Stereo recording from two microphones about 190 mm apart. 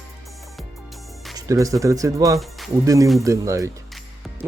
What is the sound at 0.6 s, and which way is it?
Music, centre (ahead or behind).